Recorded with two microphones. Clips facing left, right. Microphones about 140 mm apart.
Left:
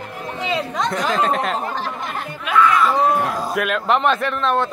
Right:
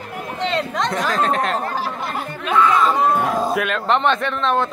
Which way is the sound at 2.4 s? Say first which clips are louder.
Even; 25° right (ahead or behind).